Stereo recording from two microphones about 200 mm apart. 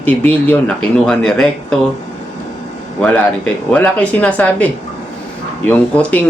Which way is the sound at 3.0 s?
10° left (ahead or behind).